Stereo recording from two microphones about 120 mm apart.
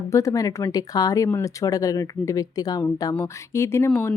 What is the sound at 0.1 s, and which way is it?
Speech, 25° left (ahead or behind).